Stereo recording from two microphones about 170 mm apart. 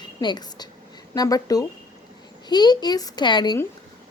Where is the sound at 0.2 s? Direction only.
25° left (ahead or behind).